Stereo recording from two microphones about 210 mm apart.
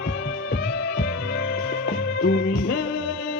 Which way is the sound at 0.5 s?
50° left (ahead or behind).